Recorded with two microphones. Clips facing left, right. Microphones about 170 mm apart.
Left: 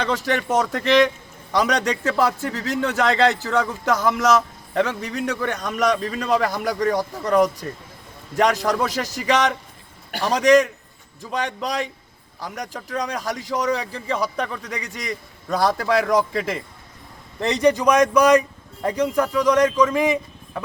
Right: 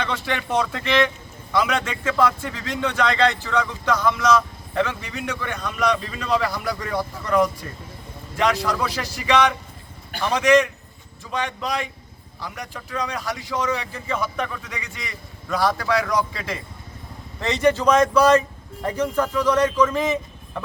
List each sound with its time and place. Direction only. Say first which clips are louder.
0.0 s a man's voice: left 4 dB; 40° left (ahead or behind)
17.5 s speech: left 1 dB; 15° left (ahead or behind)